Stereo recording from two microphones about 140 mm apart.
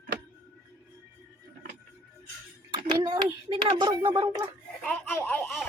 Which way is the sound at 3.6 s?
30° right (ahead or behind).